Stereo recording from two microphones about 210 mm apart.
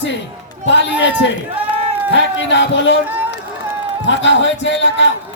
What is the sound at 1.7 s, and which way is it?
Run, 30° right (ahead or behind).